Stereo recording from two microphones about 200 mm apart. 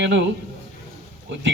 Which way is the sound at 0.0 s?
65° right (ahead or behind).